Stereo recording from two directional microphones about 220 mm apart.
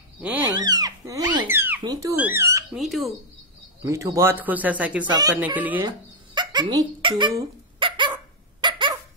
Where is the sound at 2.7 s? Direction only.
Centre (ahead or behind).